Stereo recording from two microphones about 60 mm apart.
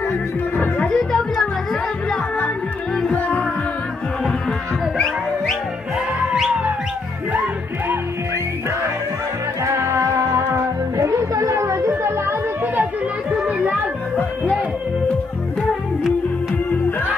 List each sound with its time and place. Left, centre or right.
0.8 s speech: centre
3.1 s music: left
4.5 s music: centre
9.7 s music: right
11.0 s chatter: right
13.5 s a sound: right